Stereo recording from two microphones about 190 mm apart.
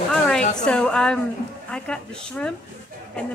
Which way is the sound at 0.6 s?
5° left (ahead or behind).